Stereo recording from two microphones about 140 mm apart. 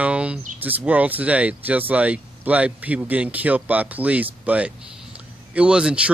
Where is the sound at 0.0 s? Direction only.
10° right (ahead or behind).